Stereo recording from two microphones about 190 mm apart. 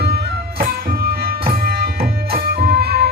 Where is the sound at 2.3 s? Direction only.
50° right (ahead or behind).